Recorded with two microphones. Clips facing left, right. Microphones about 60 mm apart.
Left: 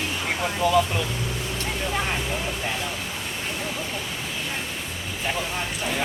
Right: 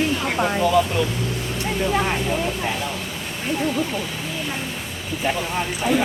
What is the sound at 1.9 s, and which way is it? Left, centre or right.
Speech, centre.